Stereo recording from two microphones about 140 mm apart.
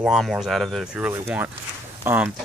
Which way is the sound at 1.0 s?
10° right (ahead or behind).